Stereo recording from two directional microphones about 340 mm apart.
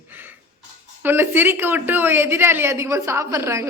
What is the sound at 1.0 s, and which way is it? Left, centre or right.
Speech, centre.